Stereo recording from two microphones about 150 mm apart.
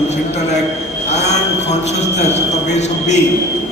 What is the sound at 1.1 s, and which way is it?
A man's voice, 50° left (ahead or behind).